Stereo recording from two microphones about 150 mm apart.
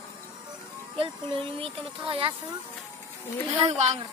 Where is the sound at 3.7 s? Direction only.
50° right (ahead or behind).